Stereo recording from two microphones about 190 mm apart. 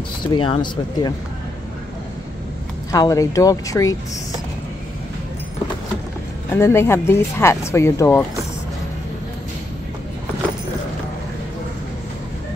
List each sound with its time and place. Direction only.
0.3 s speech: 25° left (ahead or behind)
2.9 s speech: 20° left (ahead or behind)
6.5 s speech: 15° left (ahead or behind)